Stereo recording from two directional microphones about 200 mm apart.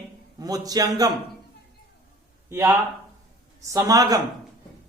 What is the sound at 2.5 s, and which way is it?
Speech, 15° right (ahead or behind).